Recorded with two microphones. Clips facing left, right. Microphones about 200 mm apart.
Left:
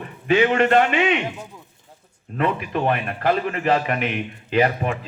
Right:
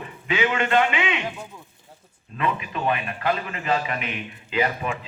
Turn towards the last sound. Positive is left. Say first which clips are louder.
# left 5 dB
turn(degrees=50)  # may be behind; listen again after turning